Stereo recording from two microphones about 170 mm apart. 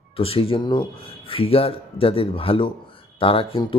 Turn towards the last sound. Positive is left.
turn(degrees=30)  # may be behind; listen again after turning